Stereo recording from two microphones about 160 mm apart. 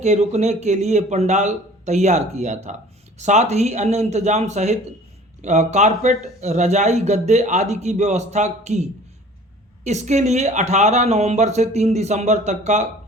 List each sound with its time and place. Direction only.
0.0 s a man's voice: 45° right (ahead or behind)
9.8 s a man's voice: 45° right (ahead or behind)